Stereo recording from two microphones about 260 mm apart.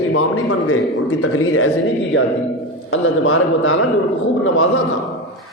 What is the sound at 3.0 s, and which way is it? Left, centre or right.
Speech, left.